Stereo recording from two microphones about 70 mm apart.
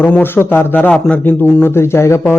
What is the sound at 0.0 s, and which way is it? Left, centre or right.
Speech, left.